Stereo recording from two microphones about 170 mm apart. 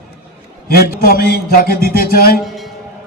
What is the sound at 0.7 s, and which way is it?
A man's voice, 60° left (ahead or behind).